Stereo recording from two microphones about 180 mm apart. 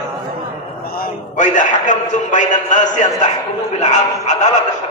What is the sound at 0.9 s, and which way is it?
A man's voice, 55° left (ahead or behind).